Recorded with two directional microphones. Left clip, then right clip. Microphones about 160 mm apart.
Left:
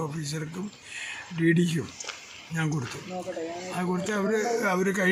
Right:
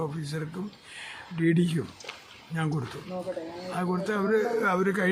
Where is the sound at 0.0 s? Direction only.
15° left (ahead or behind).